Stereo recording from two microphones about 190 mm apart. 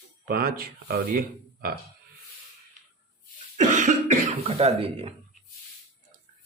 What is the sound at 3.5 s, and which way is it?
Throat clearing, 40° right (ahead or behind).